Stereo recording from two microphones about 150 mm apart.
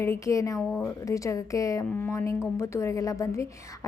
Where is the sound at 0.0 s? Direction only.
20° left (ahead or behind).